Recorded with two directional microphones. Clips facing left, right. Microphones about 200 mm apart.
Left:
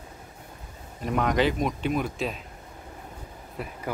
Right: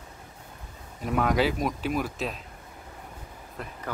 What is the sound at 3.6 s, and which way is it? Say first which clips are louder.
Speech: left 3 dB; 5° left (ahead or behind).